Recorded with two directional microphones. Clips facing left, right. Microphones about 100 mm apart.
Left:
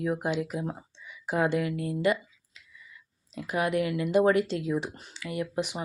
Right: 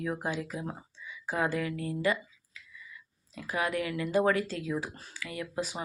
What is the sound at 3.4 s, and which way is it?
Speech, 20° left (ahead or behind).